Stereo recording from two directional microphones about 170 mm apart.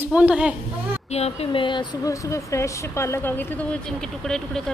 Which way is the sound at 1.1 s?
40° left (ahead or behind).